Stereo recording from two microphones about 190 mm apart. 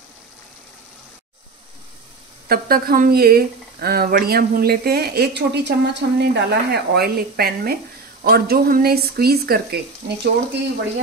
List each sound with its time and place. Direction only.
2.4 s speech: 50° right (ahead or behind)